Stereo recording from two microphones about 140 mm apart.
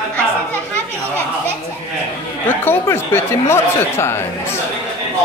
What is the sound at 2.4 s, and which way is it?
Speech, 15° left (ahead or behind).